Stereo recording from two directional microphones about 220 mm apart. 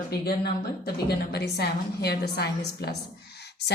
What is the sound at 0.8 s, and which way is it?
A woman's voice, 45° left (ahead or behind).